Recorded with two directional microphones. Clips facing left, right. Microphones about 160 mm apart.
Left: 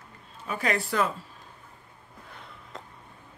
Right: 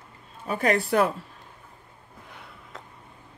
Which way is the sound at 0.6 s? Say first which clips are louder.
Right 5 dB; 55° right (ahead or behind).